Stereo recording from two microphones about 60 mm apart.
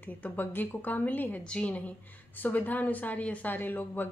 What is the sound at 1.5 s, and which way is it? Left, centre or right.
Speech, centre.